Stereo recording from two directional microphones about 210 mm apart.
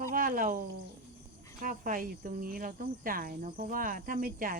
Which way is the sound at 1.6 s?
40° right (ahead or behind).